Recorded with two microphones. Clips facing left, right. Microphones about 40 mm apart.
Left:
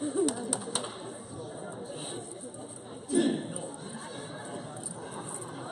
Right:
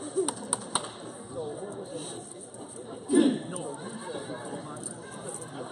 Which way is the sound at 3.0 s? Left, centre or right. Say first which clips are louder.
Right 5 dB; centre.